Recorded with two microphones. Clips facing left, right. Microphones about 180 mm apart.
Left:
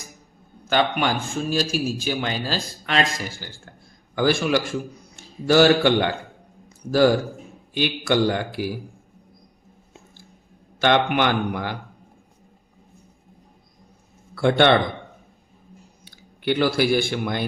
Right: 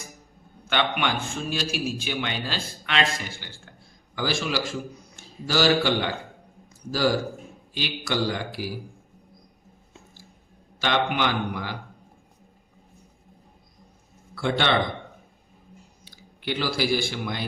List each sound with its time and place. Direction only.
0.7 s a man's voice: 40° left (ahead or behind); by 6.1 s 55° left (ahead or behind)
7.7 s a man's voice: 55° left (ahead or behind)
10.8 s a man's voice: 60° left (ahead or behind)
14.3 s a man's voice: 60° left (ahead or behind)
16.0 s speech: 55° left (ahead or behind)